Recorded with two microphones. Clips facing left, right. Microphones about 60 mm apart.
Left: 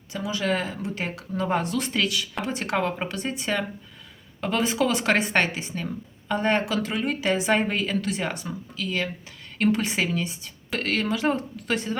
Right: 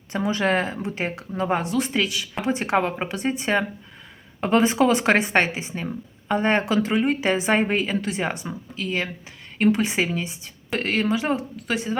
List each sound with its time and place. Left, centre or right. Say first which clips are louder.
0.1 s speech: right 4 dB; right; by 11.9 s centre